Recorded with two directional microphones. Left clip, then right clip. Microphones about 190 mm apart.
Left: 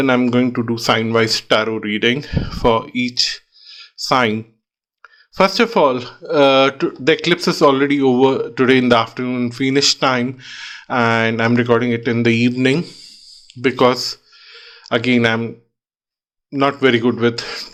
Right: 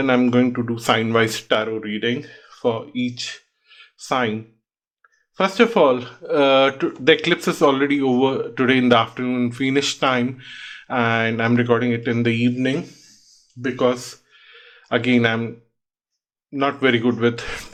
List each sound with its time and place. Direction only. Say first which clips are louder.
0.0 s speech: left 2 dB; 20° left (ahead or behind)
13.6 s speech: left 6 dB; 50° left (ahead or behind)
14.3 s a sound: left 6 dB; 25° left (ahead or behind)
16.5 s speech: left 4 dB; 25° left (ahead or behind)